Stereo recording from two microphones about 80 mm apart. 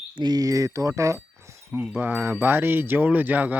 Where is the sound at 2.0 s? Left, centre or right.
Right.